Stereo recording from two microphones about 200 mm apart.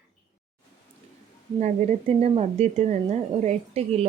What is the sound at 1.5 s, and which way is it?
Speech, 35° right (ahead or behind).